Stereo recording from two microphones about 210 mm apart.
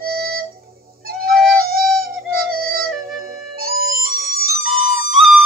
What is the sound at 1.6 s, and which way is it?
Music, 45° right (ahead or behind).